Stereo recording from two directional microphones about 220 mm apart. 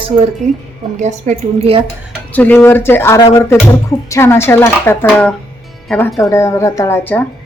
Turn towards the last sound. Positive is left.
turn(degrees=10)  # may be behind; listen again after turning